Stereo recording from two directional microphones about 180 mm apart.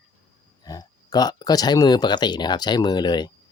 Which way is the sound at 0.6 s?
20° left (ahead or behind).